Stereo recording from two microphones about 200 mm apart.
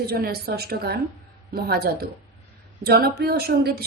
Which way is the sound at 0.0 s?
50° right (ahead or behind).